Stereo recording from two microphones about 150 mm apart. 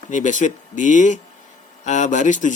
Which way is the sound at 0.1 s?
55° left (ahead or behind).